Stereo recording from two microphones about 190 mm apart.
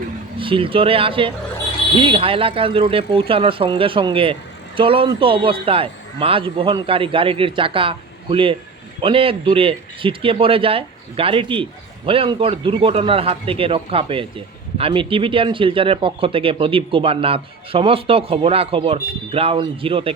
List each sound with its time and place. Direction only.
0.3 s speech: 25° right (ahead or behind)